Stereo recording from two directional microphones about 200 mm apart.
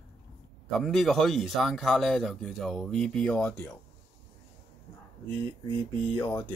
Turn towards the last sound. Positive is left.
turn(degrees=15)  # may be behind; listen again after turning